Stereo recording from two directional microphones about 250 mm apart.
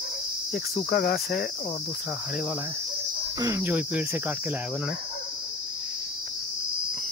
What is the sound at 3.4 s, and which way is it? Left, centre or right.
Cricket, centre.